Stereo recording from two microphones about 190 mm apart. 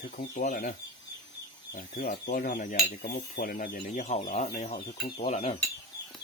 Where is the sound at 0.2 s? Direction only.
40° left (ahead or behind).